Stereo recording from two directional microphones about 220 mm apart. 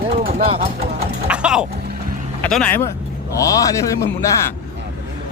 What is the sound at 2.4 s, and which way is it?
A man's voice, 5° left (ahead or behind).